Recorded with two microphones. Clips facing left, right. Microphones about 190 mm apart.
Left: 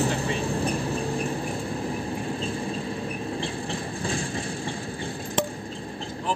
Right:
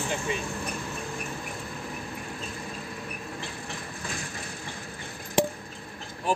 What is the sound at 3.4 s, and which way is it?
Vehicle, 30° left (ahead or behind).